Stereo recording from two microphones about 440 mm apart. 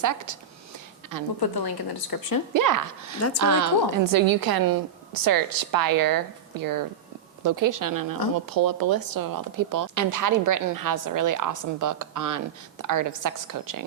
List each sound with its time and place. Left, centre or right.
0.0 s a woman's voice: right
1.4 s speech: left
2.5 s a woman's voice: right